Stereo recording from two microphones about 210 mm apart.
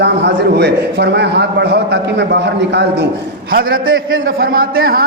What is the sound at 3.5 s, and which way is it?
A man's voice, 45° right (ahead or behind).